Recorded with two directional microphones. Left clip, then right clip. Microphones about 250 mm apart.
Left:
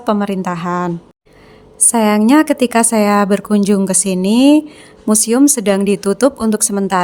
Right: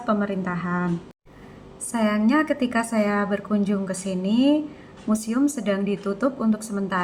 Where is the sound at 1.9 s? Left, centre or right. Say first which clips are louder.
Left 10 dB; left.